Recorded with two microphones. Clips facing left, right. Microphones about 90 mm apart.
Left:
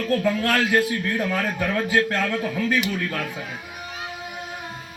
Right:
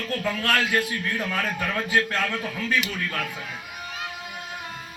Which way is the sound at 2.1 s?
25° left (ahead or behind).